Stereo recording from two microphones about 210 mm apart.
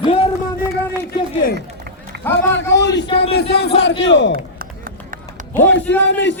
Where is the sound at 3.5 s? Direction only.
50° left (ahead or behind).